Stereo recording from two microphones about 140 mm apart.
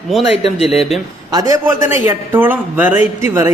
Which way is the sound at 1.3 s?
25° right (ahead or behind).